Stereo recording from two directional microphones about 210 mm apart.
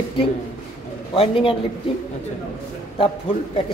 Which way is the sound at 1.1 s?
25° left (ahead or behind).